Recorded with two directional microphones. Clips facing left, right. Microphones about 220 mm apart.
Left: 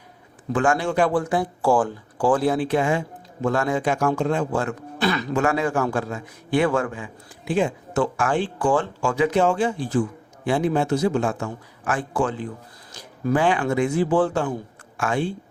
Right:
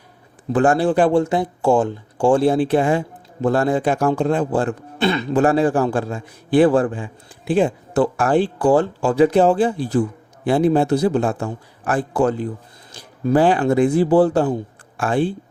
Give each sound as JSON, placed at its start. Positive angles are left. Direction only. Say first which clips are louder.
{"t": 0.5, "sound": "a man's voice", "louder": "right 5 dB", "side_deg": -35}